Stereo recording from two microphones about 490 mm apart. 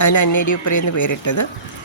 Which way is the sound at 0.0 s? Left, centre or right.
Left.